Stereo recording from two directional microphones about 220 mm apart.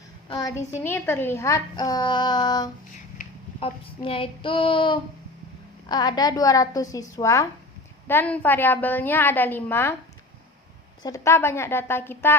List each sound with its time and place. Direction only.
0.3 s a woman's voice: 15° left (ahead or behind)
3.6 s child singing: 25° left (ahead or behind)
5.9 s a woman's voice: 20° left (ahead or behind)
11.0 s a woman's voice: 15° left (ahead or behind)